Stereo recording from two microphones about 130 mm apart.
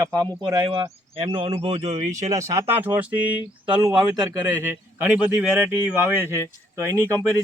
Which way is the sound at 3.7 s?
35° right (ahead or behind).